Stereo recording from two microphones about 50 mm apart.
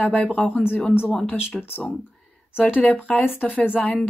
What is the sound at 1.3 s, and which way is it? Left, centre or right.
Speech, left.